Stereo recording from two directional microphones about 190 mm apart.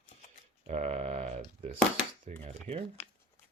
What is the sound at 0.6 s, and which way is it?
Speech, 35° right (ahead or behind).